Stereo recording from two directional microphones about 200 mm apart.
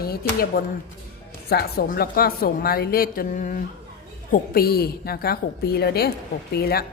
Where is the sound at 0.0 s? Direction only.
50° left (ahead or behind).